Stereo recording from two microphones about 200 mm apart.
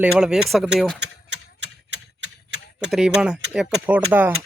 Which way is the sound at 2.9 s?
5° right (ahead or behind).